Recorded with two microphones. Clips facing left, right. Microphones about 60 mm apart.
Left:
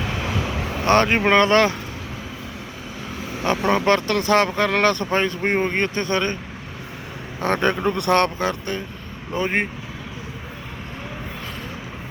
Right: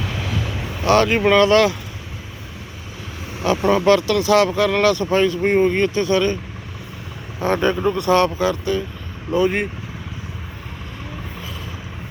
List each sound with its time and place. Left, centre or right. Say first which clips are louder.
0.9 s speech: right 2 dB; left
3.7 s speech: right 4 dB; left
7.4 s speech: right 2 dB; left
9.3 s speech: right 4 dB; left